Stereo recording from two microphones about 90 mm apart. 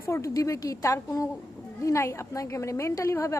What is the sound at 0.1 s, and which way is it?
A woman's voice, 35° left (ahead or behind).